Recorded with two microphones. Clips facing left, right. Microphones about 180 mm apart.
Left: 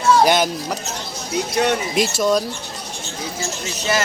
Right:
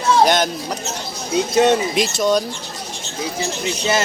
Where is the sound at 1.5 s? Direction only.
20° right (ahead or behind).